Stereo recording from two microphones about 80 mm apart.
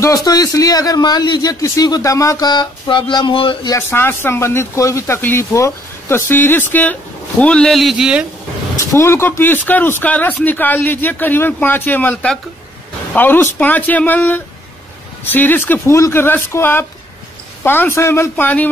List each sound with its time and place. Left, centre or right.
0.0 s a man's voice: left
2.4 s speech: left
3.9 s speech: left
7.7 s speech: centre
8.7 s speech: left
18.3 s speech: centre